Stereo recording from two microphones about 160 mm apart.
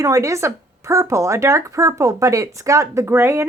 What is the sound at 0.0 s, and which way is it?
A woman's voice, 20° right (ahead or behind).